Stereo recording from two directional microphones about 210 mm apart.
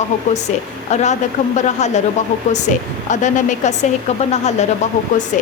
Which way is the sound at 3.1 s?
35° left (ahead or behind).